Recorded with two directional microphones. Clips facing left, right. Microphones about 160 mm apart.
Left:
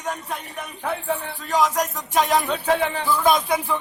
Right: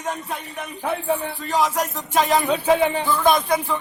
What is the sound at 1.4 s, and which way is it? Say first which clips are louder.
Music: left 1 dB; 5° right (ahead or behind).